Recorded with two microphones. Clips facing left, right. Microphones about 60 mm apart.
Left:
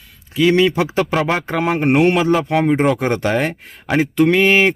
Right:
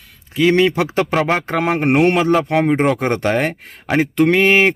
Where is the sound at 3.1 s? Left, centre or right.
Right.